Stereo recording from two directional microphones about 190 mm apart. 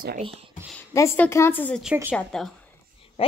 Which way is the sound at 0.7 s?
15° left (ahead or behind).